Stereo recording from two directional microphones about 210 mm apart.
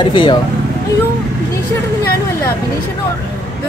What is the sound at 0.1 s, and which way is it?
Speech, 20° left (ahead or behind).